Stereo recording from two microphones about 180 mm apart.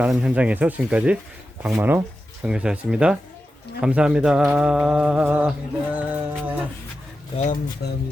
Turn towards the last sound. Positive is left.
turn(degrees=65)  # may be behind; listen again after turning